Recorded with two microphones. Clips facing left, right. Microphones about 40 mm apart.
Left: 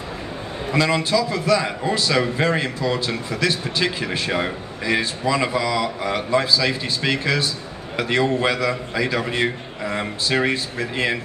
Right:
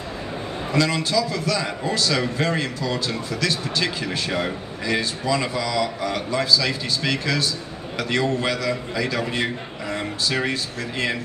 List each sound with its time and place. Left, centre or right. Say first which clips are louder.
0.7 s a man's voice: left 2 dB; centre